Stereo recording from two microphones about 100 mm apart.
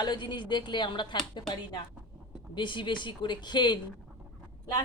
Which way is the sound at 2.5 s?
55° left (ahead or behind).